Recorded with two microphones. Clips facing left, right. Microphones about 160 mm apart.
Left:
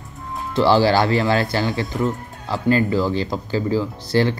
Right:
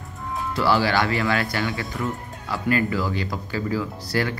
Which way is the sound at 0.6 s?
30° left (ahead or behind).